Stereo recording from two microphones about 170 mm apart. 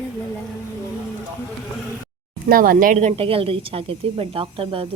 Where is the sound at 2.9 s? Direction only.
35° right (ahead or behind).